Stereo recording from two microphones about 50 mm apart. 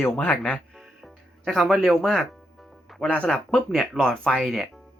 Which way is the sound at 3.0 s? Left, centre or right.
Left.